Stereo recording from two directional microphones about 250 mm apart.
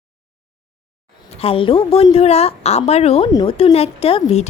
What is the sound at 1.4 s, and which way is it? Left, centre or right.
A woman's voice, left.